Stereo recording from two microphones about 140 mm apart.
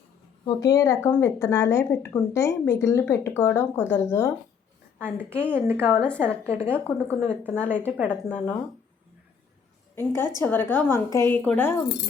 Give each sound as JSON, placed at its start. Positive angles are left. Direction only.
{"t": 0.4, "sound": "a woman's voice", "side_deg": 25}
{"t": 5.5, "sound": "a woman's voice", "side_deg": -15}
{"t": 5.8, "sound": "speech", "side_deg": 10}
{"t": 6.4, "sound": "a woman's voice", "side_deg": 45}
{"t": 6.7, "sound": "speech", "side_deg": 10}
{"t": 9.9, "sound": "a woman's voice", "side_deg": 15}